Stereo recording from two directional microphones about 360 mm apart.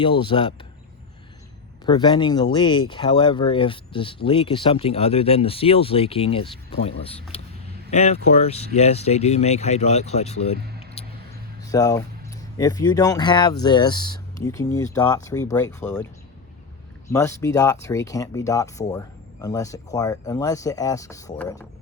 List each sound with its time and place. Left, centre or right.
0.0 s speech: centre
1.9 s speech: centre
11.0 s vehicle: centre
11.7 s speech: centre
17.1 s speech: centre